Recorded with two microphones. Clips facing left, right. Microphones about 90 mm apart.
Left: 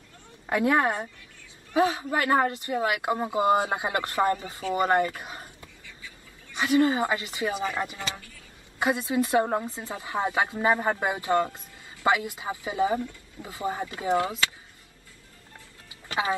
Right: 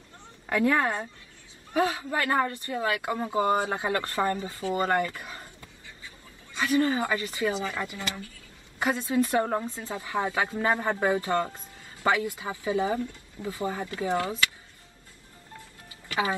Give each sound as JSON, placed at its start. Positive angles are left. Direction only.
{"t": 0.5, "sound": "speech", "side_deg": 20}
{"t": 16.1, "sound": "speech", "side_deg": 20}